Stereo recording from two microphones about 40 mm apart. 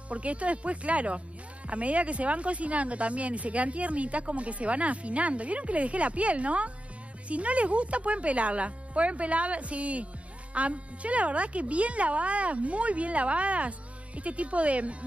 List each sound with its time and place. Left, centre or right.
0.1 s speech: right